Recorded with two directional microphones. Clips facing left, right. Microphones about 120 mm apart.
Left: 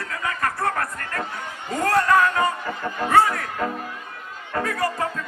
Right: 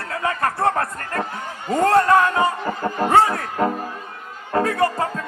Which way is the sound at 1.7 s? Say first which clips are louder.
Right 4 dB; 25° right (ahead or behind).